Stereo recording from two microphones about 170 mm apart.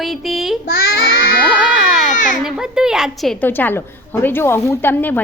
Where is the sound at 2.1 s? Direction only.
50° left (ahead or behind).